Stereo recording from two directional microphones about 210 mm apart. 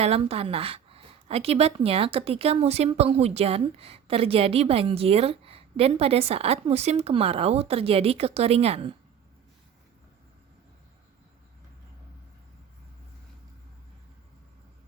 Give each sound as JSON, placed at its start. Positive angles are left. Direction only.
{"t": 0.0, "sound": "a woman's voice", "side_deg": -30}